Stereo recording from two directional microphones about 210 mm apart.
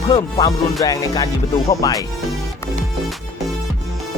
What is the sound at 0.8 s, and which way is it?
Speech, 20° left (ahead or behind).